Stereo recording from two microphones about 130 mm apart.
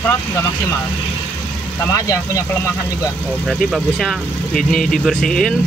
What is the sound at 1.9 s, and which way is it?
Speech, 25° left (ahead or behind).